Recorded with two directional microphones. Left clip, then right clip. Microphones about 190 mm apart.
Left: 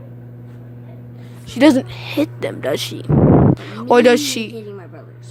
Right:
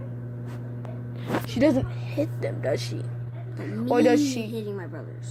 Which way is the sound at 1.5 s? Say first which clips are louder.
Left 10 dB; 50° left (ahead or behind).